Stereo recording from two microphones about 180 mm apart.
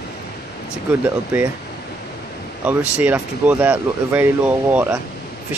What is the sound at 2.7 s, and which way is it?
Speech, 10° right (ahead or behind).